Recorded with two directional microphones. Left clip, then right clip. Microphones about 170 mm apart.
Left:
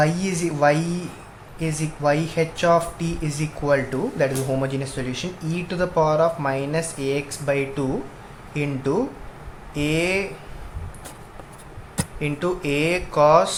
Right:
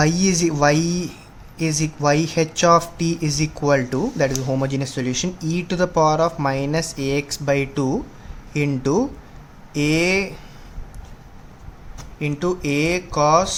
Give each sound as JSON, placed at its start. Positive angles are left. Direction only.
{"t": 0.0, "sound": "speech", "side_deg": -50}
{"t": 12.2, "sound": "speech", "side_deg": -40}